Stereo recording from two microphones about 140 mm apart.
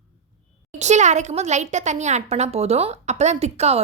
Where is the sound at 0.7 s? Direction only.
55° right (ahead or behind).